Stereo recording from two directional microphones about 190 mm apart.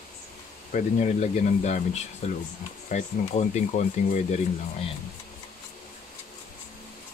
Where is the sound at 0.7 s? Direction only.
40° left (ahead or behind).